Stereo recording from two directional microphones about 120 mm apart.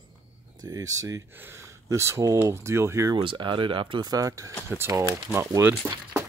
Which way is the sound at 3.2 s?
45° right (ahead or behind).